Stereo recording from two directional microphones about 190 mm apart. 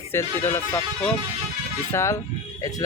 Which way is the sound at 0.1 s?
15° left (ahead or behind).